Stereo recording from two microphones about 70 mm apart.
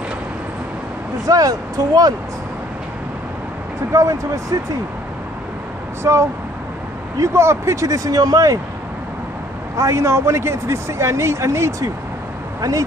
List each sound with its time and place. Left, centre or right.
1.2 s speech: right
3.9 s speech: right
6.0 s speech: right
9.8 s speech: right
12.6 s speech: right